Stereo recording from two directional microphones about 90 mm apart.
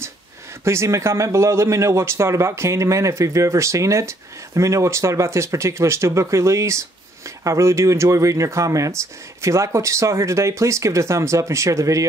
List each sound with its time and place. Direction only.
0.7 s speech: 30° right (ahead or behind)